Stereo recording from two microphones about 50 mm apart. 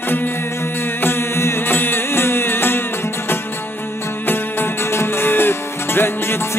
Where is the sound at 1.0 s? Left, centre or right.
Left.